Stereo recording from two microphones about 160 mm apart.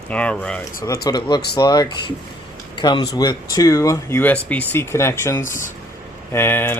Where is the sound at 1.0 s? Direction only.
25° left (ahead or behind).